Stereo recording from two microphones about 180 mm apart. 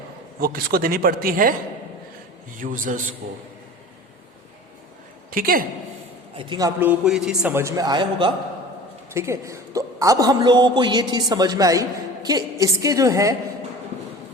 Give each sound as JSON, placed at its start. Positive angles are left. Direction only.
{"t": 0.3, "sound": "a man's voice", "side_deg": -55}
{"t": 2.6, "sound": "a man's voice", "side_deg": -50}
{"t": 5.3, "sound": "a man's voice", "side_deg": -55}
{"t": 6.3, "sound": "a man's voice", "side_deg": -25}
{"t": 7.6, "sound": "a man's voice", "side_deg": -20}